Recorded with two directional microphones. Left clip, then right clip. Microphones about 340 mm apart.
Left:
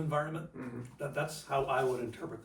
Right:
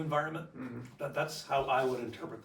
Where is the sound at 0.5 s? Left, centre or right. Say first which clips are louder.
Even; left.